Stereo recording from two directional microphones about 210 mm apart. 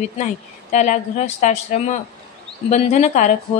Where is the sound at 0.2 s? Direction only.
35° left (ahead or behind).